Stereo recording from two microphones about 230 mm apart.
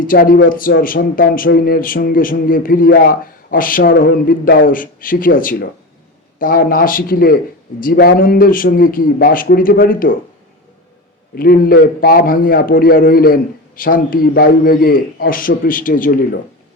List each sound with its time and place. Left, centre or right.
0.0 s a man's voice: left
11.3 s a man's voice: left